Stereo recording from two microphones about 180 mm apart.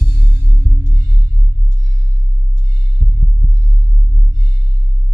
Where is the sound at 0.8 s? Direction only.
20° left (ahead or behind).